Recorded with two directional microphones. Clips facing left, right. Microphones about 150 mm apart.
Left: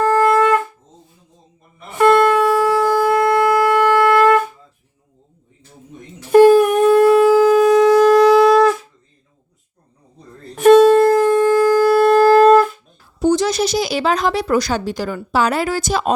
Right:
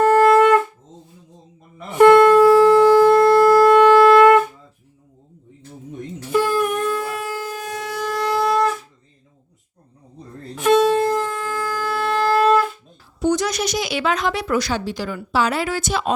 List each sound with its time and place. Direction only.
0.0 s shofar: 20° right (ahead or behind)
2.1 s shofar: 5° left (ahead or behind)
3.5 s wind instrument: 10° left (ahead or behind)
6.3 s shofar: 60° left (ahead or behind); by 8.7 s 90° left
10.5 s wind instrument: 50° left (ahead or behind)
13.1 s a woman's voice: 30° left (ahead or behind)